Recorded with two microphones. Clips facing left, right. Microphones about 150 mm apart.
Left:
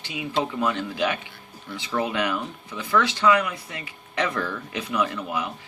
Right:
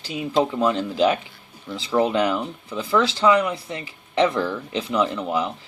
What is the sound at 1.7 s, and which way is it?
Speech, 30° right (ahead or behind).